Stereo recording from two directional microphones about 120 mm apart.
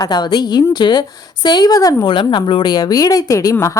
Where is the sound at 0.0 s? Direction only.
35° left (ahead or behind).